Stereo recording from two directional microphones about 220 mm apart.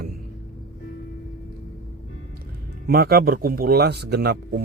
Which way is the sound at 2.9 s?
45° right (ahead or behind).